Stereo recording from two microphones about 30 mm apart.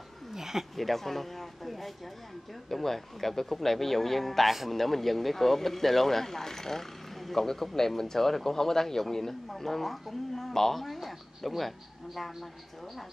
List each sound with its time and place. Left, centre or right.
0.3 s a sound: centre
0.7 s speech: centre
2.7 s speech: centre